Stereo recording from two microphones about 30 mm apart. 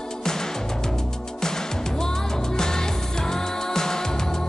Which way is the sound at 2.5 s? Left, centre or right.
Centre.